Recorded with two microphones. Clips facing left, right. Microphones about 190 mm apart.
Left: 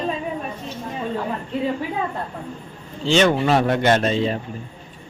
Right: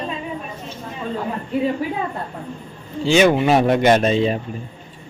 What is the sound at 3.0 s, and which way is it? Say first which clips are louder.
A man's voice: right 3 dB; 10° right (ahead or behind).